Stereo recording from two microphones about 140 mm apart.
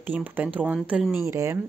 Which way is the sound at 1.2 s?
20° right (ahead or behind).